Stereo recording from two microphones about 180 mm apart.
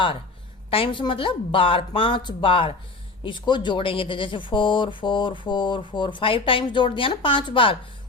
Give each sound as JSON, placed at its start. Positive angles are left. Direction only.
{"t": 0.7, "sound": "speech", "side_deg": 30}